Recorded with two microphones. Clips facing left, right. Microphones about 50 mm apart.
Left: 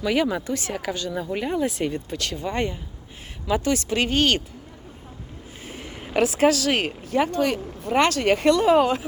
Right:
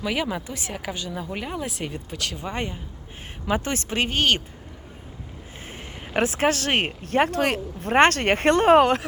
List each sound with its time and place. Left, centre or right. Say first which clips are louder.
0.0 s speech: left 4 dB; centre
3.4 s speech: left 3 dB; right
5.6 s a sound: left 3 dB; right
6.1 s speech: left 3 dB; right
7.0 s speech: right 1 dB; right
7.9 s speech: right 2 dB; right